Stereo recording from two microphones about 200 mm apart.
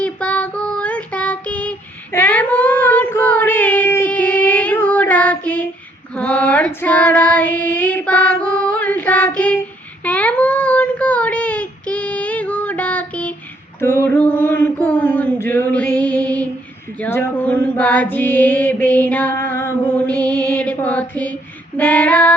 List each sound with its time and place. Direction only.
0.0 s child singing: 5° left (ahead or behind)
13.8 s mantra: 10° left (ahead or behind)
21.8 s female singing: 5° left (ahead or behind)